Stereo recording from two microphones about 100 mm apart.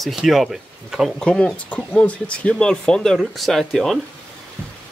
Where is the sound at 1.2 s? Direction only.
10° left (ahead or behind).